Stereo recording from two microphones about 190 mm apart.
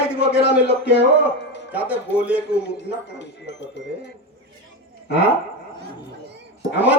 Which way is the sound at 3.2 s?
65° left (ahead or behind).